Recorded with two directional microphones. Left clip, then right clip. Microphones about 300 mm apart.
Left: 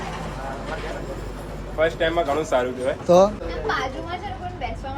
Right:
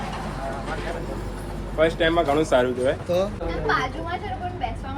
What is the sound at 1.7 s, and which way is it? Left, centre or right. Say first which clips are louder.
Speech: right 1 dB; right.